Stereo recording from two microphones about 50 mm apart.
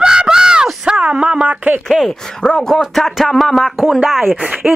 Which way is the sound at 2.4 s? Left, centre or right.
Centre.